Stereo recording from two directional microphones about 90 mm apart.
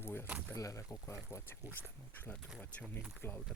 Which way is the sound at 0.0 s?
25° left (ahead or behind).